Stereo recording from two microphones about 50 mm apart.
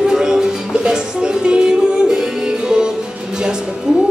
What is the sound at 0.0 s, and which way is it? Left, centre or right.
Music, centre.